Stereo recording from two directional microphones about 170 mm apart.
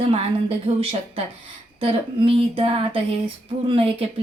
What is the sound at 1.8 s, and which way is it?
A woman's voice, 35° right (ahead or behind).